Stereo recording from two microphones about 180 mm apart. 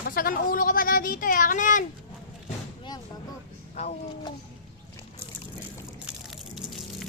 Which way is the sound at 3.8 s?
35° left (ahead or behind).